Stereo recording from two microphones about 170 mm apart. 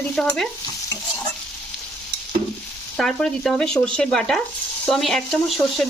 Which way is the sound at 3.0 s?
5° left (ahead or behind).